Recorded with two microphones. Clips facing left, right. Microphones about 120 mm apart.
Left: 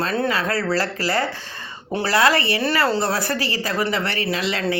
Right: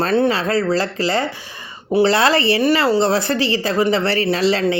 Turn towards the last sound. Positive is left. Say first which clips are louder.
# right 6 dB
turn(degrees=-30)  # may be behind; listen again after turning